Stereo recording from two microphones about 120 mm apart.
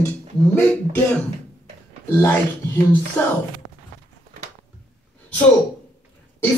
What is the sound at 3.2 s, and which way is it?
Speech, 10° left (ahead or behind).